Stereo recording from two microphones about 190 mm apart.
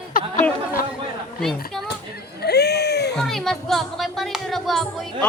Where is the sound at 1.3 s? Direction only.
Centre (ahead or behind).